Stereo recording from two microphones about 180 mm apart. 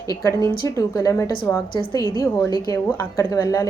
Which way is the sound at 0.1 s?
20° left (ahead or behind).